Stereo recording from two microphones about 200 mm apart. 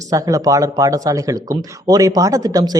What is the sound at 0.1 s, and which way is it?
A man's voice, 15° right (ahead or behind).